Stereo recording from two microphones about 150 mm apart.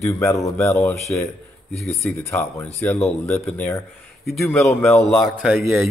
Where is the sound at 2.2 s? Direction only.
15° left (ahead or behind).